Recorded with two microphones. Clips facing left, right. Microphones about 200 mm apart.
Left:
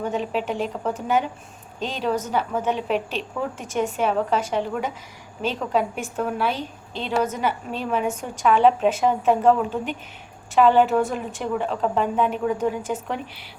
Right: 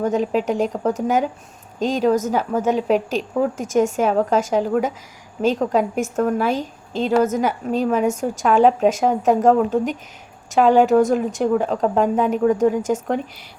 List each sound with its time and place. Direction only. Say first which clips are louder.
0.0 s a woman's voice: right 6 dB; 40° right (ahead or behind)